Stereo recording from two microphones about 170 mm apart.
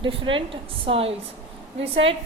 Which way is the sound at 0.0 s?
30° right (ahead or behind).